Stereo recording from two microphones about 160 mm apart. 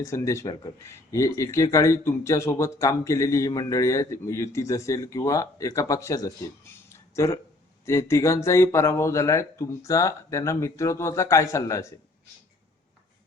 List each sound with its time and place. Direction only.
0.0 s speech: 20° left (ahead or behind)
6.9 s a sound: 20° left (ahead or behind)
7.9 s speech: 15° left (ahead or behind)